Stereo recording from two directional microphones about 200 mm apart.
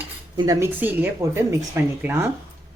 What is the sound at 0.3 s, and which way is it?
Speech, 15° right (ahead or behind).